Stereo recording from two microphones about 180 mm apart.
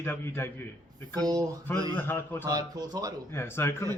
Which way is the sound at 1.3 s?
20° right (ahead or behind).